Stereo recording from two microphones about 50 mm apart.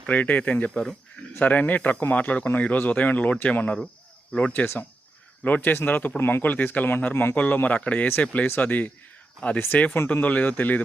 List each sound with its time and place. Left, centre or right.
0.1 s speech: left
0.7 s speech: centre
1.4 s speech: left
4.6 s speech: left
5.5 s speech: left
6.4 s speech: left
7.3 s speech: left